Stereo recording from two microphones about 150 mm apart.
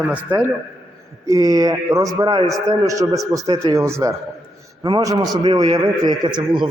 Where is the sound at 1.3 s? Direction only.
25° right (ahead or behind).